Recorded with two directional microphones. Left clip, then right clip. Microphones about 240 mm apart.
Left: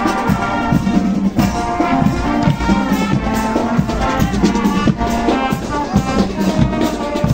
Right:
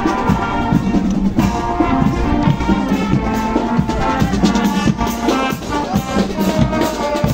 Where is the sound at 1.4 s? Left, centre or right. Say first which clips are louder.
Even; left.